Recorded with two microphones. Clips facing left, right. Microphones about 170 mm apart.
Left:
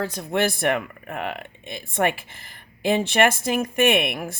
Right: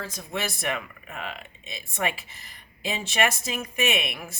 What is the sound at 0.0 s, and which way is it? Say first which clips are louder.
Speech: left 9 dB; 65° left (ahead or behind).